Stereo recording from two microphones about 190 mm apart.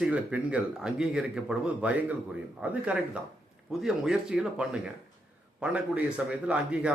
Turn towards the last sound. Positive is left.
turn(degrees=-5)  # may be behind; listen again after turning